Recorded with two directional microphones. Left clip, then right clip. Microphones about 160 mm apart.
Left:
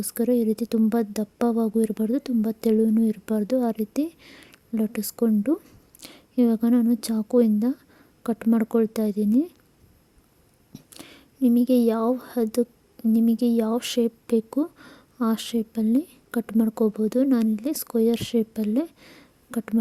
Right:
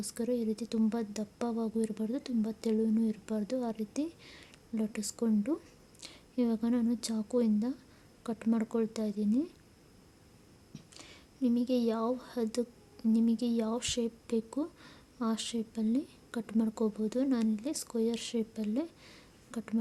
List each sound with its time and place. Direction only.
0.0 s speech: 45° left (ahead or behind)
10.8 s speech: 50° left (ahead or behind)